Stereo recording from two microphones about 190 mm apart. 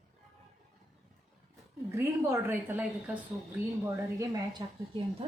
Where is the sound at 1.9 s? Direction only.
15° right (ahead or behind).